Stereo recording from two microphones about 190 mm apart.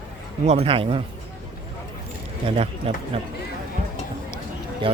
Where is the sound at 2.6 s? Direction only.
30° right (ahead or behind).